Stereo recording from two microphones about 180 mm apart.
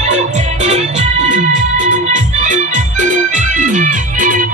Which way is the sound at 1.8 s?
45° right (ahead or behind).